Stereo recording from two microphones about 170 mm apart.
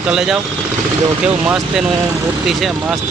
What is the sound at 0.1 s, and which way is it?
Speech, 5° right (ahead or behind).